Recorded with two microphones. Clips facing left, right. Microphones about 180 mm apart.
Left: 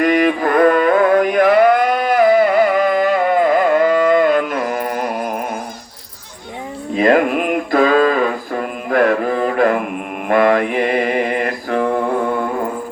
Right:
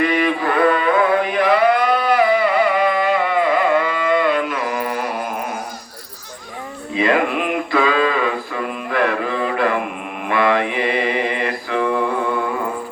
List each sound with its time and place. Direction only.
0.0 s music: 45° left (ahead or behind)
6.9 s mantra: 45° left (ahead or behind)